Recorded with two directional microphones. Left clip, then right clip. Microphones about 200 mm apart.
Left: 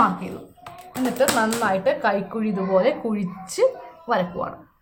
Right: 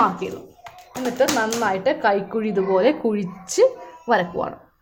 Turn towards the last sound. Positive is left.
turn(degrees=-25)  # may be behind; listen again after turning